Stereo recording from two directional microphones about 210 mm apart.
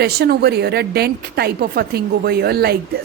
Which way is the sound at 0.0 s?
50° right (ahead or behind).